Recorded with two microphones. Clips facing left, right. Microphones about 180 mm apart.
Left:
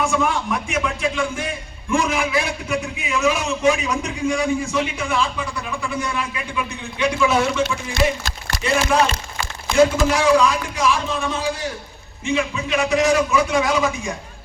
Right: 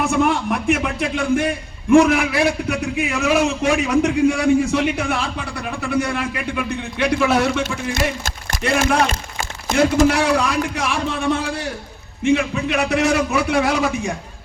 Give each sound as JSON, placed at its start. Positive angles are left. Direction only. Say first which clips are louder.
{"t": 0.1, "sound": "a man's voice", "louder": "right 3 dB", "side_deg": -60}
{"t": 8.6, "sound": "a man's voice", "louder": "right 1 dB", "side_deg": -60}
{"t": 9.4, "sound": "a man's voice", "louder": "left 2 dB", "side_deg": -45}